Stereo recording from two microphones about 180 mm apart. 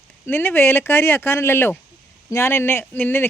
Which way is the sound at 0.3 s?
10° left (ahead or behind).